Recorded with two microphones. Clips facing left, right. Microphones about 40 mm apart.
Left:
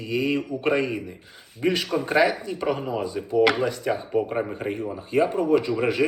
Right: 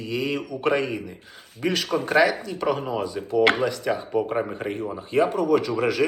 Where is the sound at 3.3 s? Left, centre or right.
Right.